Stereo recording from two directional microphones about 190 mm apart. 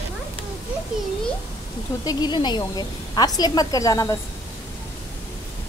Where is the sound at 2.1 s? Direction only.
20° left (ahead or behind).